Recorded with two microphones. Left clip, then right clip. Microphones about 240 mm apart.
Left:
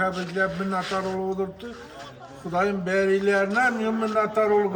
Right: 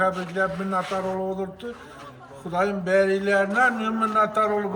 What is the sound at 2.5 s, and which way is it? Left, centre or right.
A man's voice, centre.